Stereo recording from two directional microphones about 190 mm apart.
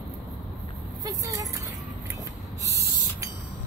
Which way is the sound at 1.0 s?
20° right (ahead or behind).